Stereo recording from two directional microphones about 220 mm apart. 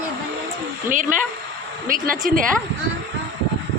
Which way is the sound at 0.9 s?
35° right (ahead or behind).